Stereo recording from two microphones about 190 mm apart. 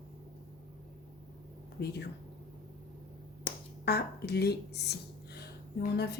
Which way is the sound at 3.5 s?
60° left (ahead or behind).